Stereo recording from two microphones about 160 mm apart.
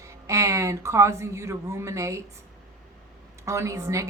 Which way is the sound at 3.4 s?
20° right (ahead or behind).